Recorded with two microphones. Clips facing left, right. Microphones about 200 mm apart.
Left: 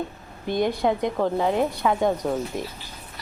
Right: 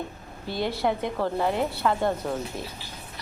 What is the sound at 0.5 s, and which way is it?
Speech, 15° left (ahead or behind).